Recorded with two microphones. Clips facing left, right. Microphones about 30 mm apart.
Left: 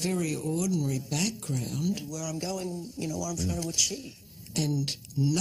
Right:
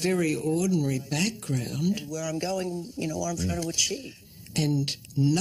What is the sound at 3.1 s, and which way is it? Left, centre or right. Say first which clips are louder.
Speech: right 3 dB; right.